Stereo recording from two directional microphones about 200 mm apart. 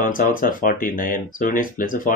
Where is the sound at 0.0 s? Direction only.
45° left (ahead or behind).